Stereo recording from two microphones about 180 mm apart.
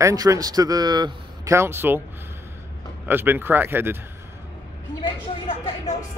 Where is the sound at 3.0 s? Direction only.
10° right (ahead or behind).